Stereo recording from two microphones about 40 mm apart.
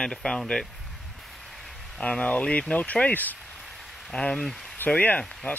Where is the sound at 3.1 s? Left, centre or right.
Left.